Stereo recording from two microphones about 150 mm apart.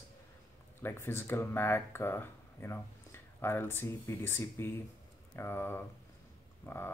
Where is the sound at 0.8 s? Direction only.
15° left (ahead or behind).